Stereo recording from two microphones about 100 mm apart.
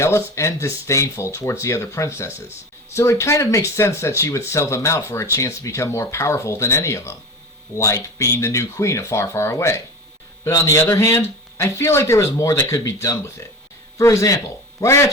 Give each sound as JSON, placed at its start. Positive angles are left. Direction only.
{"t": 0.0, "sound": "speech", "side_deg": 25}